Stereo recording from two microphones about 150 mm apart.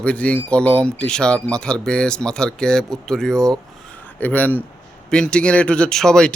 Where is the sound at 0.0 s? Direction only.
10° left (ahead or behind).